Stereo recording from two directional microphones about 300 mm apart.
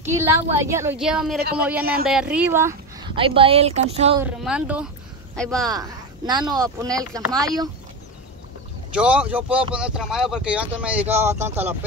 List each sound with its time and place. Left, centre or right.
0.0 s speech: centre
4.2 s speech: centre
5.7 s speech: centre
8.9 s speech: centre